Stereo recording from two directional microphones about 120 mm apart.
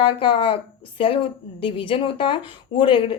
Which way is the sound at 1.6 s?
50° left (ahead or behind).